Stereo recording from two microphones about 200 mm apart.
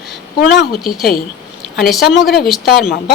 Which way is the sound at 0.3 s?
55° left (ahead or behind).